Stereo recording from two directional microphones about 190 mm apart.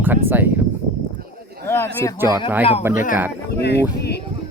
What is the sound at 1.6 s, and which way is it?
Speech, 10° left (ahead or behind).